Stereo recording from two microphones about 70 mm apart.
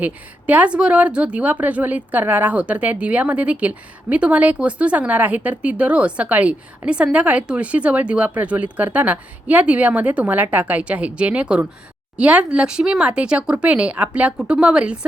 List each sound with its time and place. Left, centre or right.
0.0 s a woman's voice: right